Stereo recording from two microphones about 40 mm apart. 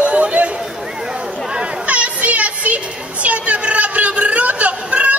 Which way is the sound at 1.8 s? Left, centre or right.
Right.